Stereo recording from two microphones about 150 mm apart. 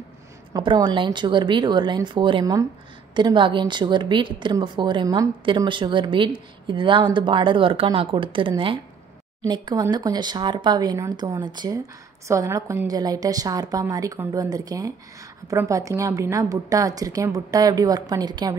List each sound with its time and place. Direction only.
0.5 s a woman's voice: 30° right (ahead or behind)